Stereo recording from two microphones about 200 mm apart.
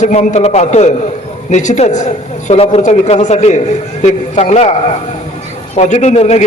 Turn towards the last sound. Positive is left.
turn(degrees=35)  # may be behind; listen again after turning